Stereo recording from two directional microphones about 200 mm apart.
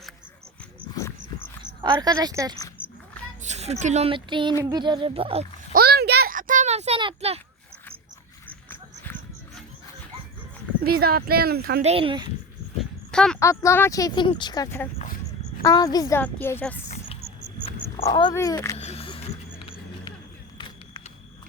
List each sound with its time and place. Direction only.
0.9 s dog: 15° left (ahead or behind)
1.6 s speech: 20° right (ahead or behind)
3.4 s a woman's voice: 35° right (ahead or behind)
5.7 s a sound: 50° right (ahead or behind); by 7.4 s 30° right (ahead or behind)
10.8 s speech: 50° right (ahead or behind)
11.8 s speech: 30° right (ahead or behind)
12.8 s a sound: 5° left (ahead or behind)
13.4 s speech: 15° left (ahead or behind)
14.9 s a sound: 40° left (ahead or behind)
15.6 s speech: 20° left (ahead or behind)
17.2 s music: 30° right (ahead or behind)
18.0 s speech: 20° left (ahead or behind)
18.8 s a sound: 30° left (ahead or behind)